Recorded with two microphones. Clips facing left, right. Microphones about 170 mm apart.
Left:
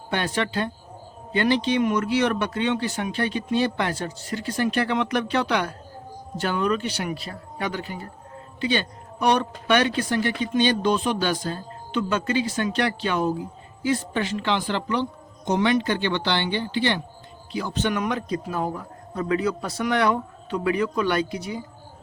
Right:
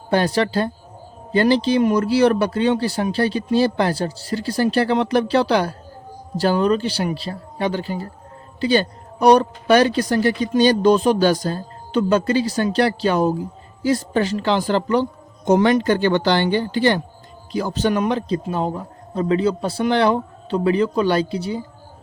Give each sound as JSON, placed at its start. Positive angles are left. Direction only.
{"t": 0.1, "sound": "a man's voice", "side_deg": -35}